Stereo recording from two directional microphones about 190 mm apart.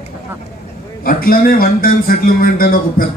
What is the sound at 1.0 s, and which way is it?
Speech, 50° left (ahead or behind).